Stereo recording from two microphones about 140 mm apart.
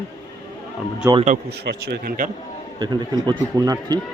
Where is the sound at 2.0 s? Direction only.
80° right.